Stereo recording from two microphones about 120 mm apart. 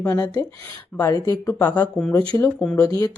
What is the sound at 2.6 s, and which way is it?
Speech, 10° left (ahead or behind).